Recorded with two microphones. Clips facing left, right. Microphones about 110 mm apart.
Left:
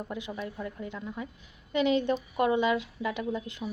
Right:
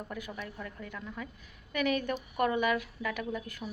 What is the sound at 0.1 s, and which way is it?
Speech, 20° left (ahead or behind).